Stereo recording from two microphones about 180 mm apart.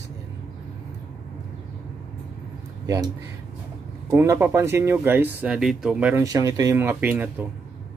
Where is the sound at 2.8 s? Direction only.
20° right (ahead or behind).